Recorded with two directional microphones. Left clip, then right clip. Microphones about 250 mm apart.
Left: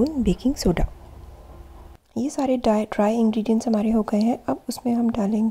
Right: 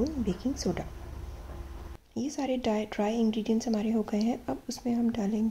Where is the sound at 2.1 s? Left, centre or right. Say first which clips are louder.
Left 8 dB; left.